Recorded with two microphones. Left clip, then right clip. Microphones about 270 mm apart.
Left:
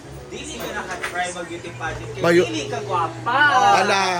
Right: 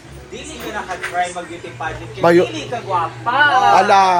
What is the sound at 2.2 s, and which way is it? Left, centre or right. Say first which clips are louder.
Speech: right 5 dB; centre.